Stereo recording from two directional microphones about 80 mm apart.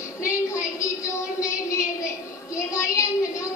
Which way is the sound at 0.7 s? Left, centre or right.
Left.